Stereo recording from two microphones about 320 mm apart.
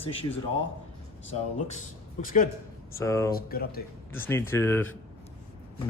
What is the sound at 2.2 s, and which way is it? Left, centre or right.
Speech, left.